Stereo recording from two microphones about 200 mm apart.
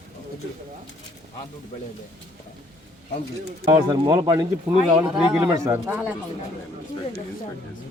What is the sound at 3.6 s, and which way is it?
Speech, 20° right (ahead or behind).